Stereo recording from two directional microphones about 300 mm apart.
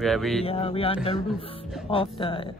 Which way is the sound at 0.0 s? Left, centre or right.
Centre.